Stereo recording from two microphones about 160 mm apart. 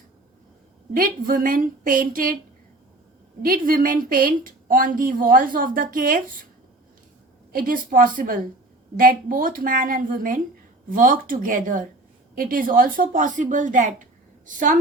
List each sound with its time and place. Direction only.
0.9 s a woman's voice: 60° right (ahead or behind)
3.4 s a woman's voice: 60° right (ahead or behind)
7.5 s a woman's voice: 60° right (ahead or behind)